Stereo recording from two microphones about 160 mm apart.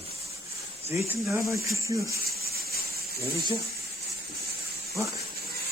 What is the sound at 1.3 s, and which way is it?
Speech, 20° right (ahead or behind).